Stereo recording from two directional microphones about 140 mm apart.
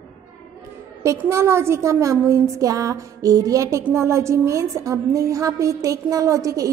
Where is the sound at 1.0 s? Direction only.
20° right (ahead or behind).